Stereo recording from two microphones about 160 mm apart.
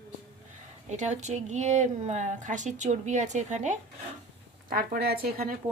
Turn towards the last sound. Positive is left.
turn(degrees=-70)  # may be behind; listen again after turning